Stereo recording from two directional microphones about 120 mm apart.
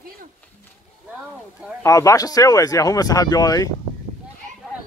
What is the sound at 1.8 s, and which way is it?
Speech, 25° left (ahead or behind).